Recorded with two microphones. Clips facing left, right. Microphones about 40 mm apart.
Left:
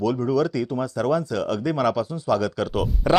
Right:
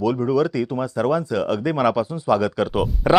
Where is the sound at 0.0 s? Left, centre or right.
Centre.